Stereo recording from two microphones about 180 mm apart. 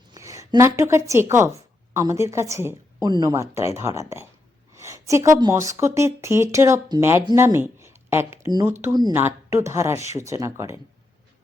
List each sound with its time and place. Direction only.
0.1 s a woman's voice: 15° right (ahead or behind)